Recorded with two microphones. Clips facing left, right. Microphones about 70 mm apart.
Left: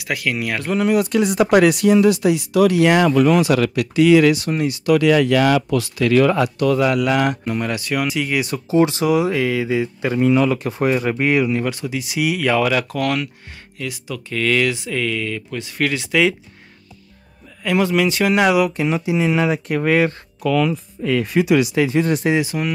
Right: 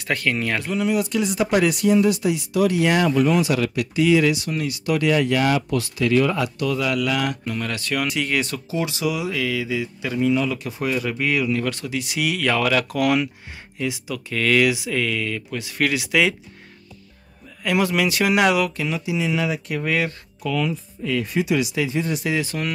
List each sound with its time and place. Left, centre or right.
0.0 s speech: centre
0.7 s speech: left
4.5 s speech: left
4.8 s speech: left
6.3 s speech: left; by 8.6 s centre
8.6 s speech: left
11.6 s speech: centre
12.8 s speech: centre
14.1 s speech: centre
17.6 s speech: centre
18.7 s speech: left
20.4 s speech: left
22.4 s speech: centre